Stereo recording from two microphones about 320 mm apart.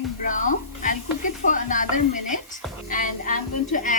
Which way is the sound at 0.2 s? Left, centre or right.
Left.